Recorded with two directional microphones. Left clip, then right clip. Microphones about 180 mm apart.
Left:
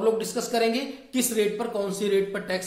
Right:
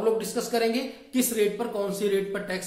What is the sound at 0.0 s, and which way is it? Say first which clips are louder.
A woman's voice: left 1 dB; 15° left (ahead or behind).